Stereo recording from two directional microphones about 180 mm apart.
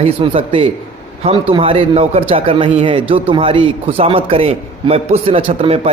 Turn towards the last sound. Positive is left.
turn(degrees=-35)  # may be behind; listen again after turning